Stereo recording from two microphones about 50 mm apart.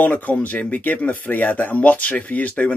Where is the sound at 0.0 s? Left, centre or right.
Left.